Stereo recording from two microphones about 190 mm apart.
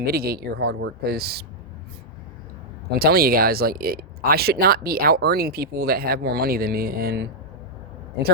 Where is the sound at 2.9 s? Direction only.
55° right (ahead or behind).